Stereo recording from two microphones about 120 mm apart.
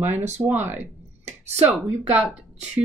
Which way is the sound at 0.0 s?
15° right (ahead or behind).